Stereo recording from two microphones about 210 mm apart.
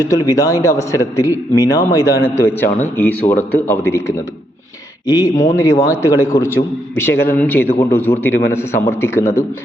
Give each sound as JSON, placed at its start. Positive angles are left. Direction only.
{"t": 0.0, "sound": "a man's voice", "side_deg": 15}